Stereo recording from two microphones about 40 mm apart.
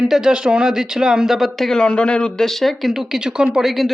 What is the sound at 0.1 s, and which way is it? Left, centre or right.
Speech, centre.